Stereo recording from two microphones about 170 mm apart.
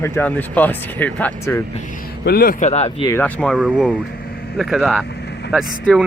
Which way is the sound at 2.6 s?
40° left (ahead or behind).